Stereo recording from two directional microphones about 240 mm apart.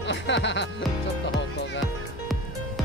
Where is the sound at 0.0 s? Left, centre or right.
Left.